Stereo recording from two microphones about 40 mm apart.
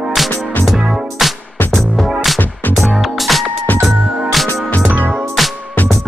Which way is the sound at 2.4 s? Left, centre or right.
Left.